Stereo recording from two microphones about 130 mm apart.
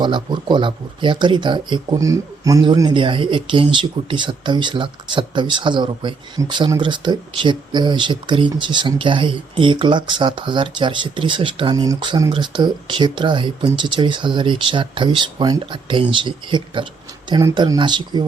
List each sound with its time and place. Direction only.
0.0 s speech: 35° right (ahead or behind)